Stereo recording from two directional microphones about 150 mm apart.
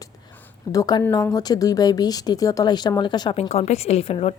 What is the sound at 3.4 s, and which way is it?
Speech, 45° left (ahead or behind).